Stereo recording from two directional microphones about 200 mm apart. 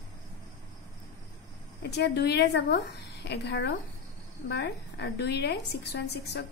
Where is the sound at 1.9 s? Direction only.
55° left (ahead or behind).